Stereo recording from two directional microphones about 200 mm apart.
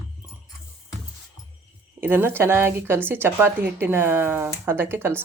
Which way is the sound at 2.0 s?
10° right (ahead or behind).